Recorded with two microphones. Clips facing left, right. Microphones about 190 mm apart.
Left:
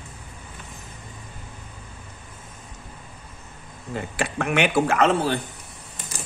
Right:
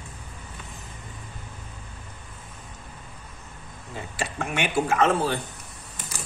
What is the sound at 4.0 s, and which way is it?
Speech, 65° left (ahead or behind).